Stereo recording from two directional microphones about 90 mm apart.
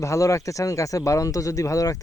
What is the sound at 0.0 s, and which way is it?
Speech, 35° left (ahead or behind).